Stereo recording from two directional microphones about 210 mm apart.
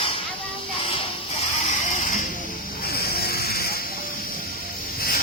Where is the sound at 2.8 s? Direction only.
45° left (ahead or behind).